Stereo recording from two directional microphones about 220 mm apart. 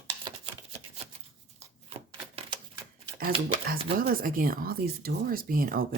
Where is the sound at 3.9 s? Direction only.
40° right (ahead or behind).